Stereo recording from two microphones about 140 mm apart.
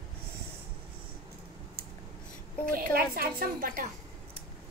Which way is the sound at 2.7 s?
90° right.